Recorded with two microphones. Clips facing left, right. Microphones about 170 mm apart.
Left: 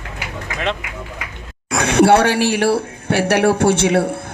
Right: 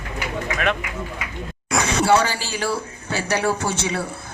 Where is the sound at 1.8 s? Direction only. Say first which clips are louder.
Left 6 dB; 60° left (ahead or behind).